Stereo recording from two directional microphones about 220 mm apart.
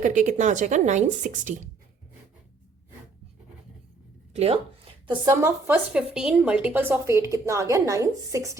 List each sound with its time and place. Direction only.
0.0 s speech: 35° right (ahead or behind)
4.4 s a woman's voice: 25° right (ahead or behind)